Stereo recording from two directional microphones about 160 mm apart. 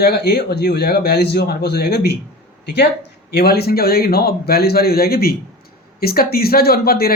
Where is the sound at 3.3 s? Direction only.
85° left.